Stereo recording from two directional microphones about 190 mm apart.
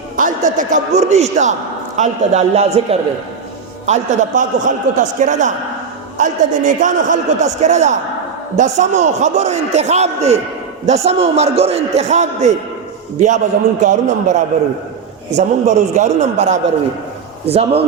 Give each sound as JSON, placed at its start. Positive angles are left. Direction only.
{"t": 0.2, "sound": "a man's voice", "side_deg": -45}